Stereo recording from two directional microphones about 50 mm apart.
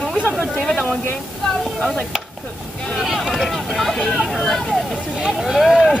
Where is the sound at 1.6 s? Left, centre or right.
Centre.